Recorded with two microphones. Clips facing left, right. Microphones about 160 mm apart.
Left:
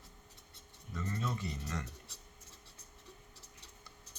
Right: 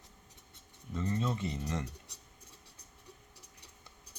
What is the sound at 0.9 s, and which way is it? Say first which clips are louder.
Speech: right 5 dB; 20° right (ahead or behind).